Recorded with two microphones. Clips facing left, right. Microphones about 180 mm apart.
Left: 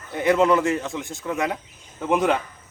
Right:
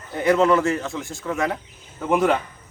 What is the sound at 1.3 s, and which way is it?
Speech, 20° left (ahead or behind).